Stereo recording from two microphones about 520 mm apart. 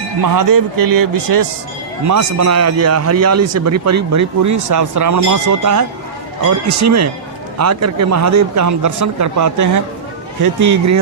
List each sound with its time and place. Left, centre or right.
0.2 s a man's voice: right